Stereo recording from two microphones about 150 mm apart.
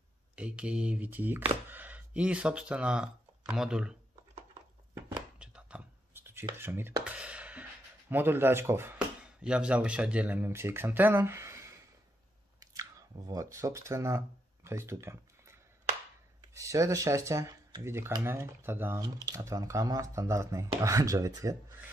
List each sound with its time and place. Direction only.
0.4 s speech: 5° right (ahead or behind)
4.9 s whispering: 5° right (ahead or behind)
8.1 s speech: 15° right (ahead or behind)
13.3 s speech: 20° right (ahead or behind)